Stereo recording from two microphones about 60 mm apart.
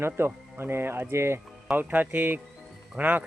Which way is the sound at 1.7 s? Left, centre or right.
Right.